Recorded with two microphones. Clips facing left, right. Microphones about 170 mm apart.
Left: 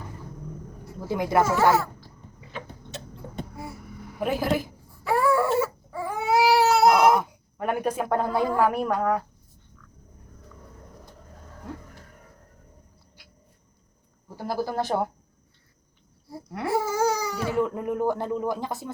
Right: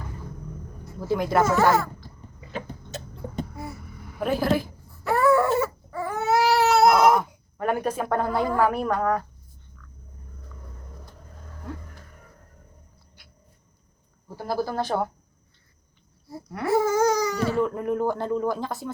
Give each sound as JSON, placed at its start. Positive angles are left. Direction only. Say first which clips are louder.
{"t": 1.0, "sound": "speech", "louder": "right 1 dB", "side_deg": 15}
{"t": 4.2, "sound": "a woman's voice", "louder": "right 2 dB", "side_deg": 20}
{"t": 5.0, "sound": "baby cry", "louder": "right 2 dB", "side_deg": 10}
{"t": 14.4, "sound": "speech", "louder": "right 1 dB", "side_deg": 15}
{"t": 16.6, "sound": "speech", "louder": "right 4 dB", "side_deg": 10}